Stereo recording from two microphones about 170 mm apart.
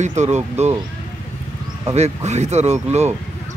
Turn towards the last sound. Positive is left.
turn(degrees=-40)  # may be behind; listen again after turning